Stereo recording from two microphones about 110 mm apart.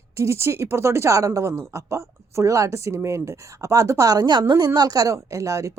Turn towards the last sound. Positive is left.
turn(degrees=-30)  # may be behind; listen again after turning